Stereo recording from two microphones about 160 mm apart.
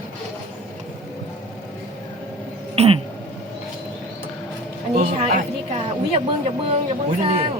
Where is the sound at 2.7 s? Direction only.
40° right (ahead or behind).